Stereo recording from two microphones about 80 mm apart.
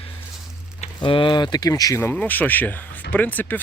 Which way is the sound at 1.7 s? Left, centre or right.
Left.